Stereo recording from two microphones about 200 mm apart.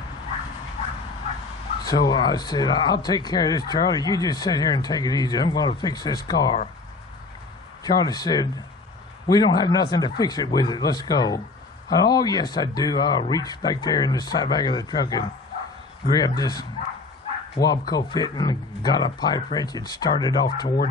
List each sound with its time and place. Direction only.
1.9 s speech: 20° left (ahead or behind)
7.8 s speech: 20° left (ahead or behind)